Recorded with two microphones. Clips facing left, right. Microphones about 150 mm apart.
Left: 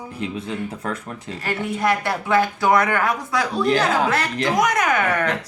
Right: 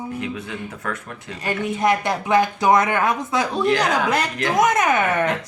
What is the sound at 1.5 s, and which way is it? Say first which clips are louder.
Speech: right 2 dB; 20° right (ahead or behind).